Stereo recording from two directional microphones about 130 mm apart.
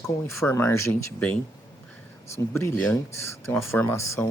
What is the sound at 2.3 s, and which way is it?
Speech, 20° left (ahead or behind).